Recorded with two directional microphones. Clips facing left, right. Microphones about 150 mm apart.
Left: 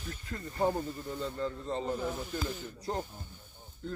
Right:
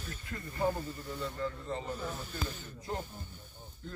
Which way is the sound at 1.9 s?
15° left (ahead or behind).